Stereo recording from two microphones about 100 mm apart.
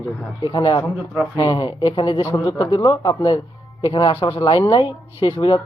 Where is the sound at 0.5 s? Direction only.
50° left (ahead or behind).